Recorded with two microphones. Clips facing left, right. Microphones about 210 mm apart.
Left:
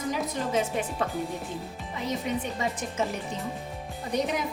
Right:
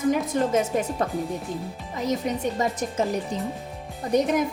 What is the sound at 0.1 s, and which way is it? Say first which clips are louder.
Speech: right 5 dB; 45° right (ahead or behind).